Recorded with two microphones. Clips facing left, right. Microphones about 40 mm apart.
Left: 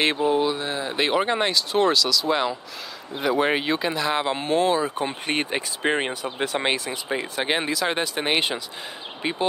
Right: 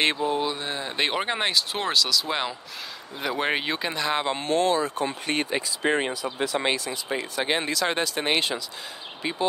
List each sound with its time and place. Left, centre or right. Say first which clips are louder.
0.3 s speech: left 4 dB; centre; by 9.5 s left